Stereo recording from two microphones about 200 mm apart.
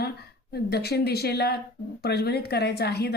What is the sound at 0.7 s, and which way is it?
Speech, 55° left (ahead or behind).